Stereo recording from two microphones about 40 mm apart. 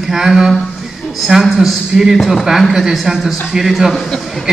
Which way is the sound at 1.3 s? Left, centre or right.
Right.